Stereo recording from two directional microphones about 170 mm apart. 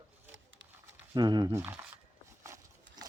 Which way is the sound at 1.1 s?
25° right (ahead or behind).